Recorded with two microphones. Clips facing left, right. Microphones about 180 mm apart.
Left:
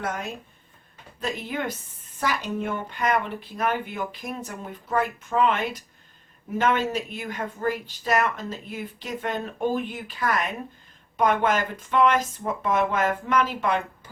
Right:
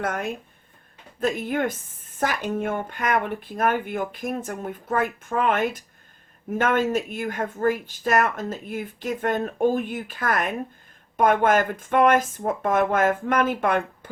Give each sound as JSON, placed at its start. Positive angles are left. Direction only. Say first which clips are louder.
{"t": 0.0, "sound": "speech", "louder": "right 3 dB", "side_deg": -55}